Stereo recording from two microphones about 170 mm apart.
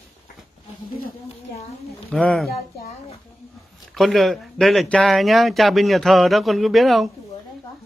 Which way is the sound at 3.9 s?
Centre (ahead or behind).